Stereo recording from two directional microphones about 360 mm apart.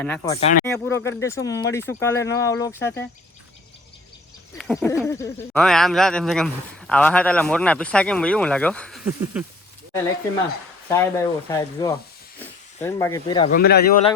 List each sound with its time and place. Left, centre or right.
0.0 s speech: centre
0.3 s speech: centre
0.6 s speech: centre
4.5 s speech: centre
10.8 s speech: centre
13.6 s a man's voice: left